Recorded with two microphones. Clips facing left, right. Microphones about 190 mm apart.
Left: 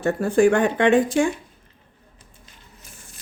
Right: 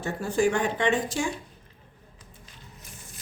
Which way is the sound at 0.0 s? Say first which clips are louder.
Left 7 dB; 55° left (ahead or behind).